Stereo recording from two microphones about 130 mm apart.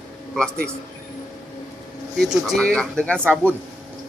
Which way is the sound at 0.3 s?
5° left (ahead or behind).